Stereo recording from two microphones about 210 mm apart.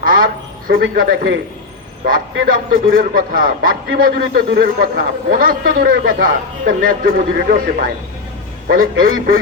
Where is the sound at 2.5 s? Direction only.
40° right (ahead or behind).